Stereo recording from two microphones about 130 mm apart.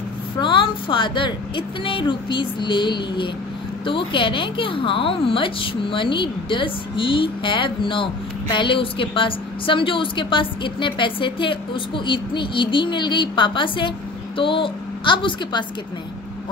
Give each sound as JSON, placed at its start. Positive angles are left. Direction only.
{"t": 0.4, "sound": "a woman's voice", "side_deg": 40}